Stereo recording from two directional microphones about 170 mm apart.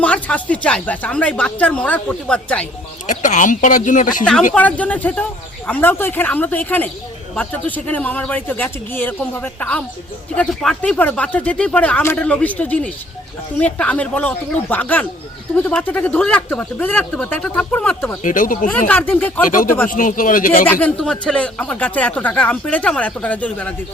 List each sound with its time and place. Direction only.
0.0 s speech: 10° left (ahead or behind)
3.1 s speech: 45° left (ahead or behind)
4.2 s speech: 5° left (ahead or behind)
18.2 s speech: 50° left (ahead or behind)
18.7 s speech: 10° left (ahead or behind)
19.9 s speech: 50° left (ahead or behind)
20.7 s speech: 5° left (ahead or behind)